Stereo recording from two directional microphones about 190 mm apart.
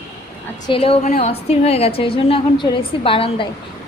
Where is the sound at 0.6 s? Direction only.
30° left (ahead or behind).